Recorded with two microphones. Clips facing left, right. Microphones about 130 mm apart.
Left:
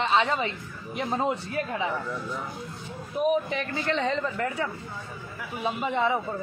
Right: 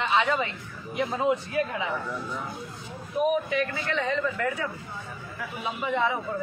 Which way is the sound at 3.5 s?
30° left (ahead or behind).